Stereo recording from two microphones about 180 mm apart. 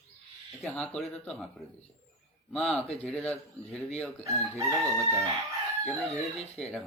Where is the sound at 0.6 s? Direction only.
5° left (ahead or behind).